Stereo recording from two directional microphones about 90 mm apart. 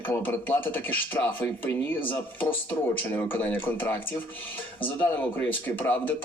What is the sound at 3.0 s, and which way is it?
Speech, 20° left (ahead or behind).